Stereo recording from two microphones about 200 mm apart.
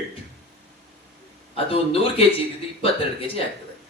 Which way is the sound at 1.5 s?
30° left (ahead or behind).